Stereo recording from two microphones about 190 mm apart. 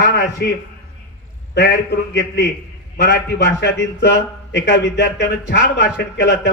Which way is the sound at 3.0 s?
60° left (ahead or behind).